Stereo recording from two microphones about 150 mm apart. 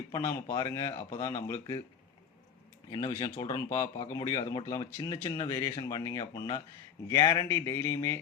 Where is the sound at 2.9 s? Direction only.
20° left (ahead or behind).